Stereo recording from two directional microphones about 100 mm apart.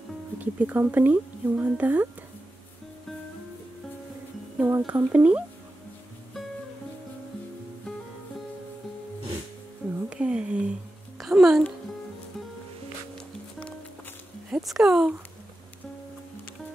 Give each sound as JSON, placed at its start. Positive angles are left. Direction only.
{"t": 0.6, "sound": "speech", "side_deg": -15}
{"t": 4.6, "sound": "speech", "side_deg": -20}
{"t": 10.0, "sound": "a sound", "side_deg": -10}
{"t": 11.1, "sound": "music", "side_deg": -5}
{"t": 14.5, "sound": "speech", "side_deg": -5}